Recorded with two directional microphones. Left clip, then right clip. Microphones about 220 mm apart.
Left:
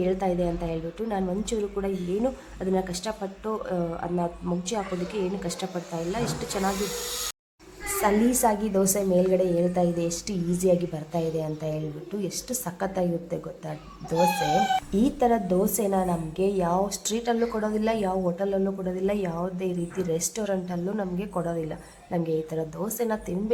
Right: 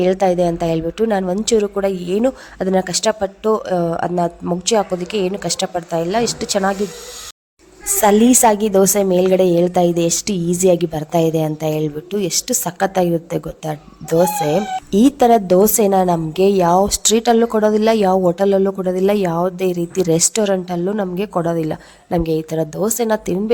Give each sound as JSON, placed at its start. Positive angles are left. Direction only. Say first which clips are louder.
{"t": 0.0, "sound": "a woman's voice", "louder": "right 11 dB", "side_deg": -40}
{"t": 8.0, "sound": "a woman's voice", "louder": "right 11 dB", "side_deg": -45}